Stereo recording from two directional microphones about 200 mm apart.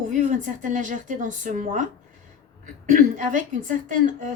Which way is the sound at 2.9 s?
40° right (ahead or behind).